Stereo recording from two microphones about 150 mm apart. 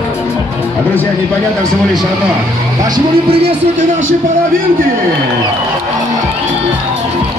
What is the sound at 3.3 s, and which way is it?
Speech, 45° right (ahead or behind).